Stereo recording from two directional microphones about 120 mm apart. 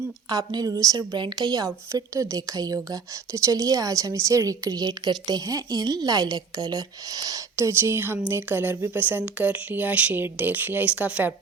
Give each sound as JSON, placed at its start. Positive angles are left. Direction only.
{"t": 0.3, "sound": "a woman's voice", "side_deg": -30}